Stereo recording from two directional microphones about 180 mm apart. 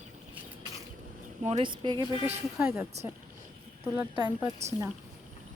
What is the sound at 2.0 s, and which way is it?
Speech, 30° left (ahead or behind).